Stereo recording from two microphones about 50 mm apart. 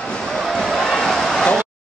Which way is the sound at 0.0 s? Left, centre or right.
Centre.